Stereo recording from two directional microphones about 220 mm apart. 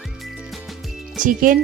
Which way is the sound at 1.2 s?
40° right (ahead or behind).